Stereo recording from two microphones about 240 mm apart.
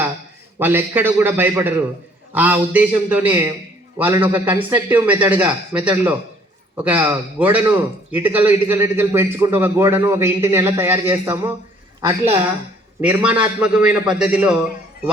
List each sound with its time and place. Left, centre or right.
0.6 s a man's voice: centre
12.0 s a woman's voice: right
13.0 s a man's voice: centre